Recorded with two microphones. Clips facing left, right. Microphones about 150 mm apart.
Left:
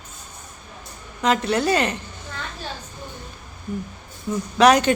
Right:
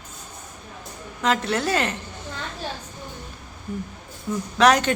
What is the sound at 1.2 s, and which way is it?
Speech, centre (ahead or behind).